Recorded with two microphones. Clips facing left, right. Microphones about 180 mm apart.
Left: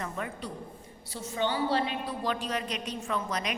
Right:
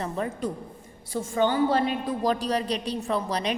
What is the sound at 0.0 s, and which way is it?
Speech, 35° right (ahead or behind).